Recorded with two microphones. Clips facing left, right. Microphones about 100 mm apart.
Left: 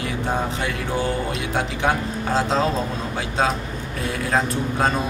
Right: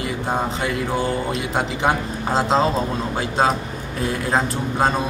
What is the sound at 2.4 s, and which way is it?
Speech, 30° right (ahead or behind).